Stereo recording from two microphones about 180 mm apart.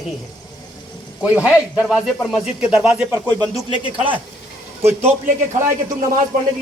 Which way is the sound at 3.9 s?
30° right (ahead or behind).